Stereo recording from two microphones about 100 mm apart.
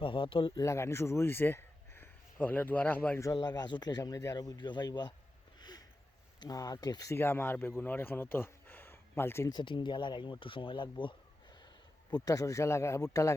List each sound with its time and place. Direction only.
0.0 s speech: 60° left (ahead or behind)
0.5 s speech: 30° left (ahead or behind)
3.3 s speech: 45° left (ahead or behind)
5.5 s a sound: 45° left (ahead or behind)
6.4 s a man's voice: 40° left (ahead or behind)
7.1 s speech: 25° left (ahead or behind)
9.5 s speech: 50° left (ahead or behind)
12.1 s a man's voice: 35° left (ahead or behind)